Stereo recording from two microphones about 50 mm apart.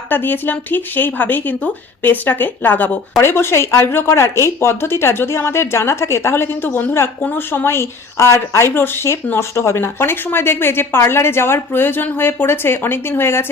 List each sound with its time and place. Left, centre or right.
0.1 s speech: left
3.2 s a woman's voice: left